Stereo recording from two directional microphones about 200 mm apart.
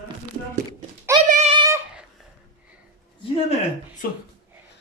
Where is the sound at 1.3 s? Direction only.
35° right (ahead or behind).